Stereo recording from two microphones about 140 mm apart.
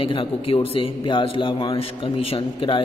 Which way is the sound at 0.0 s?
40° left (ahead or behind).